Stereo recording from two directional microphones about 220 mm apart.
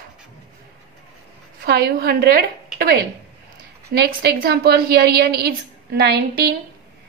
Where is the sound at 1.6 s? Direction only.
45° right (ahead or behind).